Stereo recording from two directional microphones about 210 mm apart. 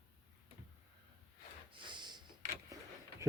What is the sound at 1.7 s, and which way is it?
Snort, 20° right (ahead or behind).